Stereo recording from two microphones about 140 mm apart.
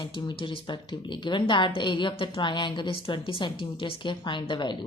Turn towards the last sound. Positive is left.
turn(degrees=35)  # may be behind; listen again after turning